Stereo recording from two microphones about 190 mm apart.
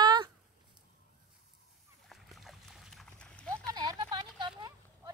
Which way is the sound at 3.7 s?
25° right (ahead or behind).